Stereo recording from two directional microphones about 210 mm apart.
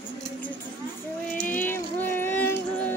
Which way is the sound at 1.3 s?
40° left (ahead or behind).